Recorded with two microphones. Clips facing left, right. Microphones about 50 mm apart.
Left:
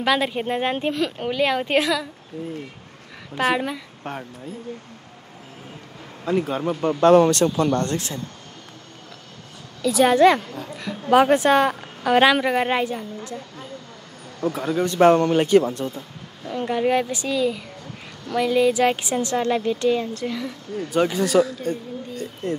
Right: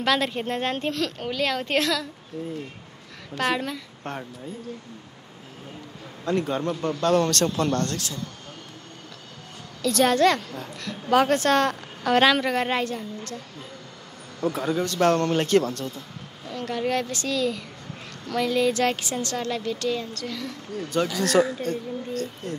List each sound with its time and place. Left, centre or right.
0.0 s a woman's voice: centre
3.3 s a woman's voice: centre
4.0 s speech: centre
6.2 s speech: centre
6.8 s speech: left
9.8 s a woman's voice: centre
14.4 s speech: centre
14.8 s a woman's voice: centre
21.3 s speech: centre
21.6 s a woman's voice: centre